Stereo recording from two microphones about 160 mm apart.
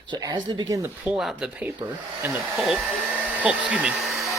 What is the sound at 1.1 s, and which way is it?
Hair dryer, 5° right (ahead or behind).